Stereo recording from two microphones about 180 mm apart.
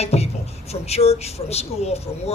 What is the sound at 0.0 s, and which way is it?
Music, 35° left (ahead or behind).